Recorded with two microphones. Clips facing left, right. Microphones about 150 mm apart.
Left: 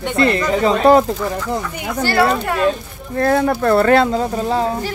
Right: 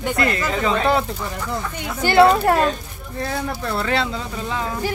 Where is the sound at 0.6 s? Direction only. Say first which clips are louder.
Left 8 dB; 40° left (ahead or behind).